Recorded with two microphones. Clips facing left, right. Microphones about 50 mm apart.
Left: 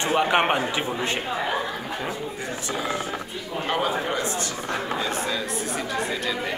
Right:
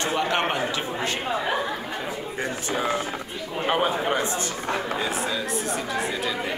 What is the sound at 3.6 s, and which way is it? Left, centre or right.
Speech, right.